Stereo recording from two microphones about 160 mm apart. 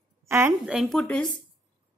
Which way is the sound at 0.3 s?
15° right (ahead or behind).